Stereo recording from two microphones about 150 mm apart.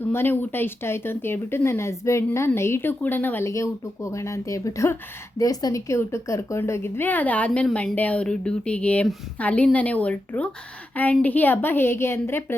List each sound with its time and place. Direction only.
0.1 s a woman's voice: 15° left (ahead or behind)